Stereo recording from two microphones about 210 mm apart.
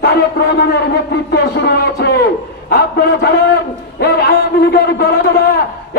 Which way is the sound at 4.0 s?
50° left (ahead or behind).